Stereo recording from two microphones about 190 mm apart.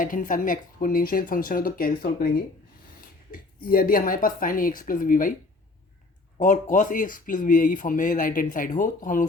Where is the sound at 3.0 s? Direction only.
50° left (ahead or behind).